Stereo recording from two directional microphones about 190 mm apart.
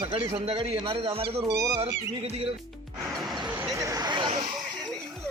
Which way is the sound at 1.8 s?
30° right (ahead or behind).